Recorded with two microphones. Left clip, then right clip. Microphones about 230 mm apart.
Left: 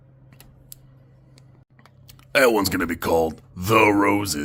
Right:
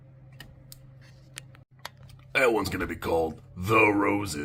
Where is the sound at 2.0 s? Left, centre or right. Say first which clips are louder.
Left 6 dB; left.